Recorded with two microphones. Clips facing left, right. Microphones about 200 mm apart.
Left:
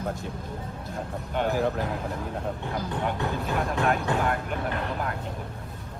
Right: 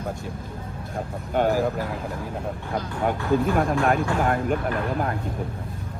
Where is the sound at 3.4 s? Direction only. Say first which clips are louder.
Right 1 dB; 50° right (ahead or behind).